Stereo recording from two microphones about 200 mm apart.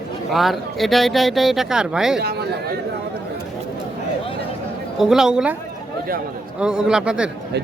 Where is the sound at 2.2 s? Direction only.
55° right (ahead or behind).